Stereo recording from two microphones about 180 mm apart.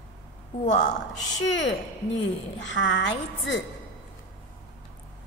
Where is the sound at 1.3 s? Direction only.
90° left.